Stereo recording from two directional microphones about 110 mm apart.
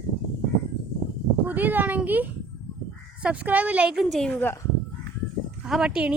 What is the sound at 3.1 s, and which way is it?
Speech, 10° right (ahead or behind).